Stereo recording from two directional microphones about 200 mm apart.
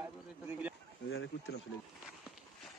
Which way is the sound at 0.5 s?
5° right (ahead or behind).